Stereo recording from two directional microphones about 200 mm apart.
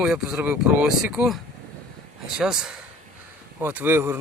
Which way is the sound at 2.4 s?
5° right (ahead or behind).